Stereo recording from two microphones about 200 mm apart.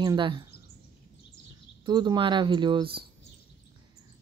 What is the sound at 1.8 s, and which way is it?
Speech, 20° right (ahead or behind).